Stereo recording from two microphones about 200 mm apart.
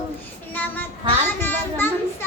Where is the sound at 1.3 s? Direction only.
10° left (ahead or behind).